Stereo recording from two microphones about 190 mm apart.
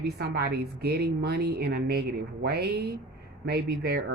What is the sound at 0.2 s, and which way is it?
Speech, 55° right (ahead or behind).